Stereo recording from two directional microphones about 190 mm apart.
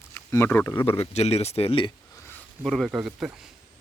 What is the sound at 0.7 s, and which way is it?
Speech, 30° left (ahead or behind).